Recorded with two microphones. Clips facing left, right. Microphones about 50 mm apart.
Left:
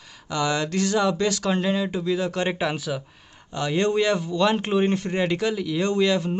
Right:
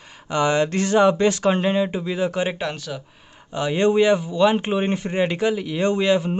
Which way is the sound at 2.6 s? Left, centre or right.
Centre.